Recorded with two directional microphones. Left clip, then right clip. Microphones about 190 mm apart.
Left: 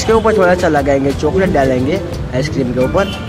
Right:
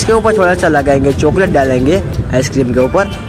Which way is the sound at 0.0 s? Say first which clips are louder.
Right 1 dB; 25° right (ahead or behind).